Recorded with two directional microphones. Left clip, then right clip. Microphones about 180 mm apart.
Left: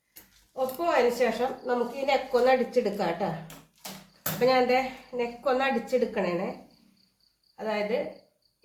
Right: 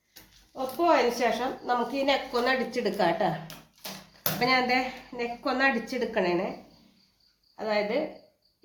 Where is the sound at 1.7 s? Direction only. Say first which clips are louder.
Right 2 dB; 40° right (ahead or behind).